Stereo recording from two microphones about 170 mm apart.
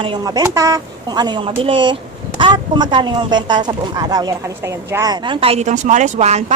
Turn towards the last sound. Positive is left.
turn(degrees=-45)  # may be behind; listen again after turning